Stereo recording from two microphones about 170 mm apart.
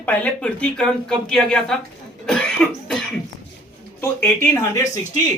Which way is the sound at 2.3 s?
5° left (ahead or behind).